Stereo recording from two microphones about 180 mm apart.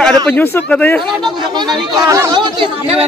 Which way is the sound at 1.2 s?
25° right (ahead or behind).